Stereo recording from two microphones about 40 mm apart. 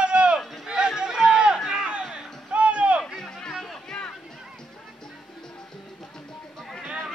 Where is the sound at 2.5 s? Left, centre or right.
Right.